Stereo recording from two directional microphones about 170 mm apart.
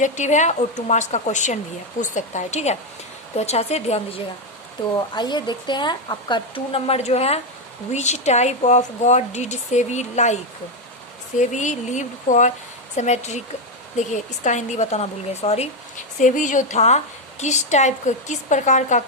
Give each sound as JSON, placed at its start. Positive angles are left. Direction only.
{"t": 0.0, "sound": "speech", "side_deg": 45}
{"t": 4.9, "sound": "speech", "side_deg": 25}
{"t": 11.3, "sound": "speech", "side_deg": 45}